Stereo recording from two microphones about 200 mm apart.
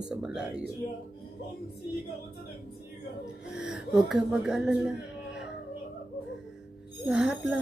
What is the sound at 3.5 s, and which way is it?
Speech, 60° left (ahead or behind).